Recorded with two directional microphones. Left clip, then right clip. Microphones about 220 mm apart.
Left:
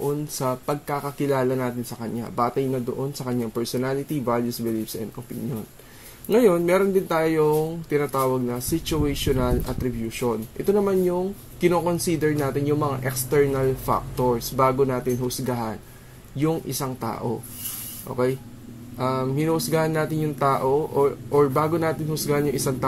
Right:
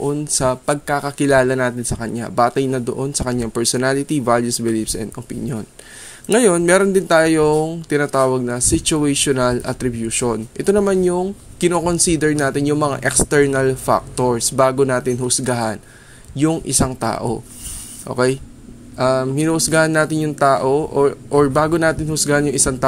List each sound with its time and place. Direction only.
0.0 s speech: 25° right (ahead or behind)
6.2 s speech: 30° right (ahead or behind)